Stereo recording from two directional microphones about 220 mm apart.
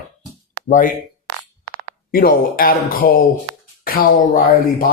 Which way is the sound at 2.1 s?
40° left (ahead or behind).